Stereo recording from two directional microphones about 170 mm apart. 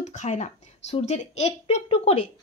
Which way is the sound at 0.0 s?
45° left (ahead or behind).